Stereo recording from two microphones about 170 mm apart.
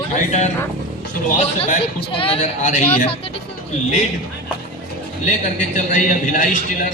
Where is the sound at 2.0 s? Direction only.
30° left (ahead or behind).